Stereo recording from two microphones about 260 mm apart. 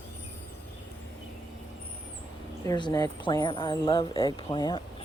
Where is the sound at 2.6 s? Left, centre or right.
Centre.